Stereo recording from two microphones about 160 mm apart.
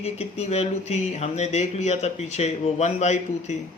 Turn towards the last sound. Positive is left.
turn(degrees=45)  # may be behind; listen again after turning